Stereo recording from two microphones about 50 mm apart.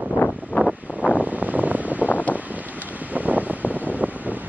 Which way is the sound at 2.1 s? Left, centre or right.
Left.